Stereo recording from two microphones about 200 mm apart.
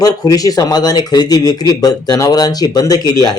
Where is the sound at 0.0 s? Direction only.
20° left (ahead or behind).